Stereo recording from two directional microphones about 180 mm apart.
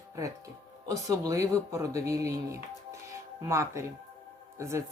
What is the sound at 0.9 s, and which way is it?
Speech, 20° right (ahead or behind).